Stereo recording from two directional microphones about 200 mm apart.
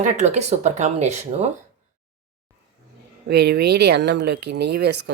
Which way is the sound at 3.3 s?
55° right (ahead or behind).